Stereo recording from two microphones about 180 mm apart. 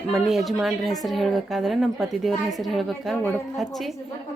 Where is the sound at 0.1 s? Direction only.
Centre (ahead or behind).